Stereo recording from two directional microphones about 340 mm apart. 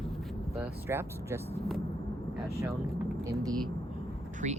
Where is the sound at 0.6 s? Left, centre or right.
Centre.